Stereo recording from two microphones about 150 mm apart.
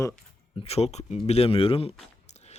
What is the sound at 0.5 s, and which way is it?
Speech, 40° left (ahead or behind).